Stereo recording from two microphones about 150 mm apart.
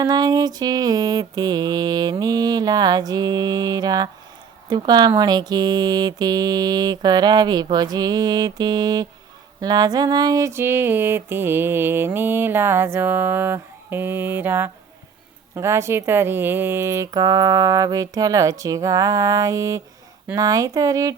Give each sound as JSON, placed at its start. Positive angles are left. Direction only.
{"t": 0.0, "sound": "speech", "side_deg": -25}
{"t": 9.6, "sound": "a sound", "side_deg": -25}
{"t": 15.5, "sound": "speech", "side_deg": -15}